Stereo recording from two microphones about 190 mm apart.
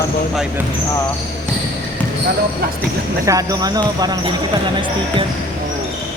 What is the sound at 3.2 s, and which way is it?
Speech, 20° right (ahead or behind).